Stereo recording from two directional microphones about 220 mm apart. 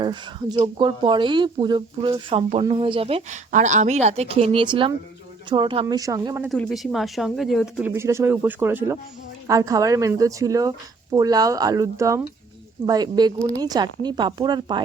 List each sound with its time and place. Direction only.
0.0 s speech: 20° right (ahead or behind)
6.5 s speech: centre (ahead or behind); by 14.8 s 20° right (ahead or behind)